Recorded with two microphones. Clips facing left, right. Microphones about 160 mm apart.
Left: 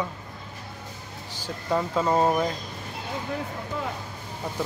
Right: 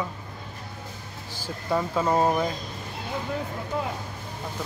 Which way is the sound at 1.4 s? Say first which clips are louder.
Even; 5° right (ahead or behind).